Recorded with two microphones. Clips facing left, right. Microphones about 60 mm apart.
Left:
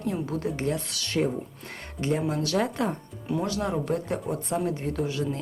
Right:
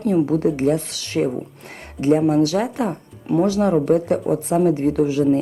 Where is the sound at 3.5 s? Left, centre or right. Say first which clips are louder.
Right 12 dB; centre.